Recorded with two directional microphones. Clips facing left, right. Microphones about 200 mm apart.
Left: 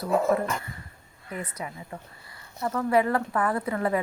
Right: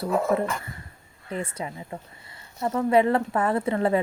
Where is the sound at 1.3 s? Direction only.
25° right (ahead or behind).